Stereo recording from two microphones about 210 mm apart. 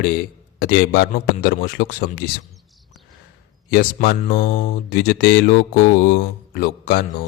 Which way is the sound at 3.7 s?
45° left (ahead or behind).